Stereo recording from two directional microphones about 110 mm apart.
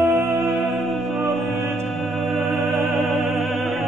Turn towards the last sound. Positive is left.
turn(degrees=0)  # may be behind; listen again after turning